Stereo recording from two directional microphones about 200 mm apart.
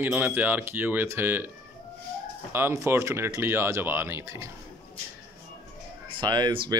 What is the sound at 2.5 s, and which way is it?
Speech, 15° right (ahead or behind).